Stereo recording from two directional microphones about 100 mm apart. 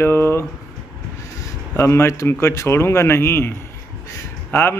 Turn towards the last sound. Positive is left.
turn(degrees=20)  # may be behind; listen again after turning